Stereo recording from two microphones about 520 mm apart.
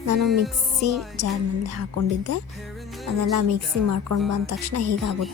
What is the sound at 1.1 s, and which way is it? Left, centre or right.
Speech, right.